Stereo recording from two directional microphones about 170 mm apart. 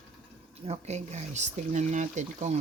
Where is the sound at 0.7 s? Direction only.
40° right (ahead or behind).